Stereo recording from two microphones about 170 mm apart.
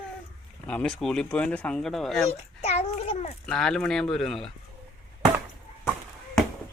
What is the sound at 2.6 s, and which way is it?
Speech, 40° left (ahead or behind).